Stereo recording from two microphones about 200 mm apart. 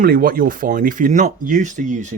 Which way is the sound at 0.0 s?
45° right (ahead or behind).